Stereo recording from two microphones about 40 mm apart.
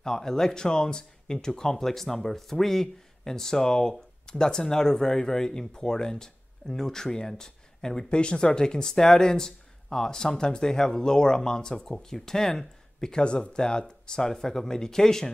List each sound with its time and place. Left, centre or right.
0.0 s speech: centre
8.2 s speech: left